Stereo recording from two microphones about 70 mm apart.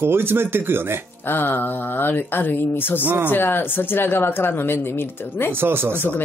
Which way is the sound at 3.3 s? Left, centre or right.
Left.